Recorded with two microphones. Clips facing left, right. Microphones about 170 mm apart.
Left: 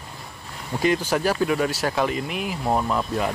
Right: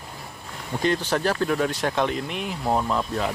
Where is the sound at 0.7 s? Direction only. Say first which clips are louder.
Left 2 dB; 5° left (ahead or behind).